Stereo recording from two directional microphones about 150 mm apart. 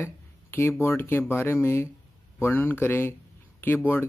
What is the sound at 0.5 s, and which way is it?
Speech, 15° left (ahead or behind).